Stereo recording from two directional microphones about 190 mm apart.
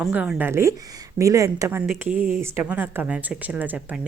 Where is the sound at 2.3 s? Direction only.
5° right (ahead or behind).